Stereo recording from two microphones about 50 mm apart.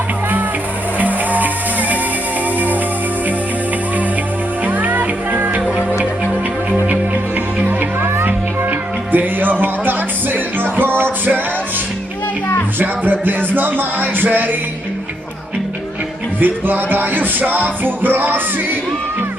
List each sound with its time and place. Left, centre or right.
0.9 s music: right
4.6 s music: right
7.6 s music: right
12.8 s music: right
16.4 s music: right